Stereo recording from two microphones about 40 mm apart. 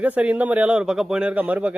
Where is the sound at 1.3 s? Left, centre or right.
Right.